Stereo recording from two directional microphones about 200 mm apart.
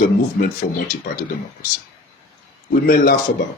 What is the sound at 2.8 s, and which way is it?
Speech, 45° left (ahead or behind).